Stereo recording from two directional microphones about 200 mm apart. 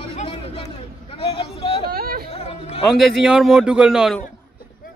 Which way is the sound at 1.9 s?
50° right (ahead or behind).